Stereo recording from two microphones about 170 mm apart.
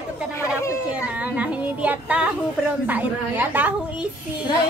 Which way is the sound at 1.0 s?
5° right (ahead or behind).